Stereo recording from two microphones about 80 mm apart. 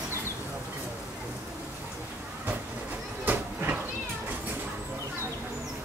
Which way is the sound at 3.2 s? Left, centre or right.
Right.